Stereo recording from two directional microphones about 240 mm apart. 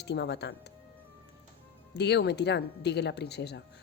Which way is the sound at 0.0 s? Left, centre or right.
Left.